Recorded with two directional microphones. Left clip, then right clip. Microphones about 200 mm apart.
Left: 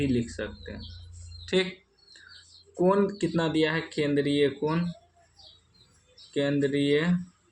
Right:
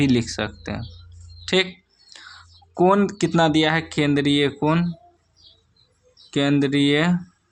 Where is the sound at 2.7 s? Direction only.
50° right (ahead or behind).